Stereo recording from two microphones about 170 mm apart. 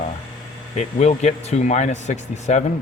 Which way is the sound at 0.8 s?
40° left (ahead or behind).